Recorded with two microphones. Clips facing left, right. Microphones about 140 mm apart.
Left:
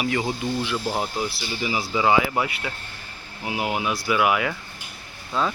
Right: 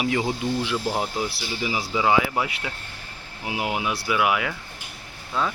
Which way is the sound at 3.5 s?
10° right (ahead or behind).